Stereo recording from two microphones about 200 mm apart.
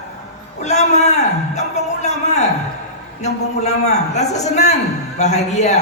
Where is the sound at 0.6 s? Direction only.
35° left (ahead or behind).